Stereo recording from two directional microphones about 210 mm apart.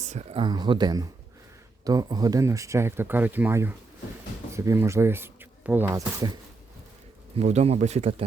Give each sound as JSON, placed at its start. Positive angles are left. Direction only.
{"t": 0.0, "sound": "speech", "side_deg": -35}
{"t": 7.3, "sound": "speech", "side_deg": -30}